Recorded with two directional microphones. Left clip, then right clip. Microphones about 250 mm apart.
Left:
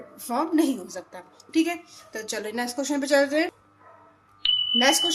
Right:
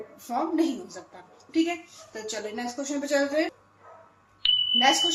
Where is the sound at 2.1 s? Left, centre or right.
Left.